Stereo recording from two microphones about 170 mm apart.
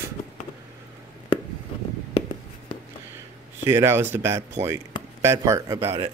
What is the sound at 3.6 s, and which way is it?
Speech, 15° right (ahead or behind).